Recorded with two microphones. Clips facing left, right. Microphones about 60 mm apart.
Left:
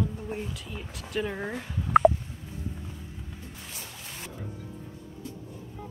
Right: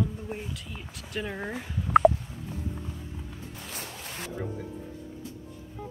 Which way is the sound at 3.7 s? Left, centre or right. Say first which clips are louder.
Right 4 dB; right.